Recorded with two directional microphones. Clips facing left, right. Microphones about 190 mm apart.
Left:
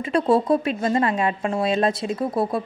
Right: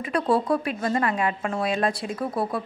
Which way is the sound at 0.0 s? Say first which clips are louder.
Left 4 dB; 25° left (ahead or behind).